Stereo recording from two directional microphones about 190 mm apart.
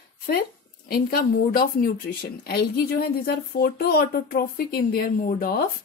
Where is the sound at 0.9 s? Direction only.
50° left (ahead or behind).